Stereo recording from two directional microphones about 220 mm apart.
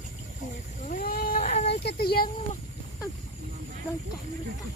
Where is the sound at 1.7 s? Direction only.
45° left (ahead or behind).